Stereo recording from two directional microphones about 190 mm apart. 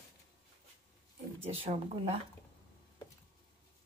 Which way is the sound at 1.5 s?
30° right (ahead or behind).